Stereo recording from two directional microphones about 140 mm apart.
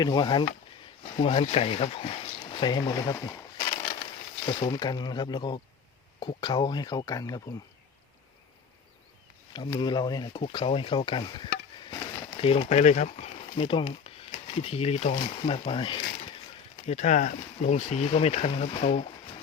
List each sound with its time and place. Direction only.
0.0 s speech: 30° left (ahead or behind)
1.1 s speech: 40° left (ahead or behind); by 7.4 s 25° left (ahead or behind)
9.5 s speech: 35° left (ahead or behind)
12.4 s speech: 45° left (ahead or behind)
16.8 s speech: 55° left (ahead or behind)